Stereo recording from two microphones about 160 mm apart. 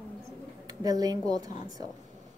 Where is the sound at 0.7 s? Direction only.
25° right (ahead or behind).